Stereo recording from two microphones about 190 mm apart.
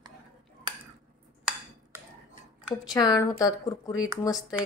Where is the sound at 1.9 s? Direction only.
15° right (ahead or behind).